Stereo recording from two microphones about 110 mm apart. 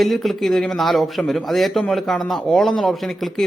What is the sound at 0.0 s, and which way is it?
Speech, centre (ahead or behind).